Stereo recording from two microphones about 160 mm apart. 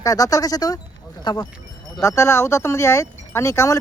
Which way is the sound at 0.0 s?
20° left (ahead or behind).